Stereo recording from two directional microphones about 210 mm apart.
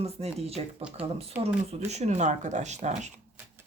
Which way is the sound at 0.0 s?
30° right (ahead or behind).